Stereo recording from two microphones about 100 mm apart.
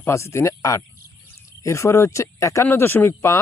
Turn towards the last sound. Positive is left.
turn(degrees=25)  # may be behind; listen again after turning